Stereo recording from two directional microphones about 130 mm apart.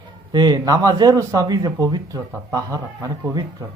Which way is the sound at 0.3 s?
30° right (ahead or behind).